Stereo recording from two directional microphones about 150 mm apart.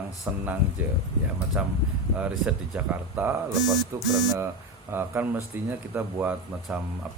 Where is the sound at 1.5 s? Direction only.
10° right (ahead or behind).